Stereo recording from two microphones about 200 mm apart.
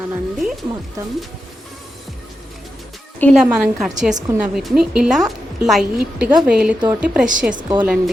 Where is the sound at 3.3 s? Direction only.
Centre (ahead or behind).